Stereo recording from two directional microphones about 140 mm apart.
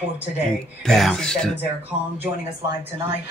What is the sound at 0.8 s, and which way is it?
Speech, 5° left (ahead or behind).